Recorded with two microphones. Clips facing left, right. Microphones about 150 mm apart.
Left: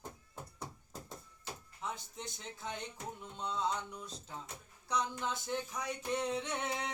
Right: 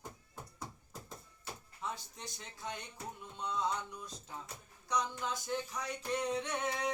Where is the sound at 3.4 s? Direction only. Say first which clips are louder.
Right 1 dB; 25° left (ahead or behind).